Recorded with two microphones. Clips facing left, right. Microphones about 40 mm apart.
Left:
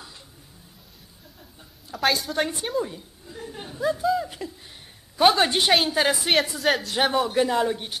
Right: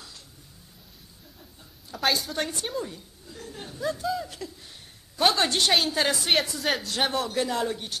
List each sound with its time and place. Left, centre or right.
1.9 s a woman's voice: centre